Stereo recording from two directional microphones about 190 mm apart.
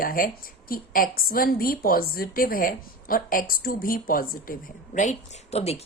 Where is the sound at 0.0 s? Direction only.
50° left (ahead or behind).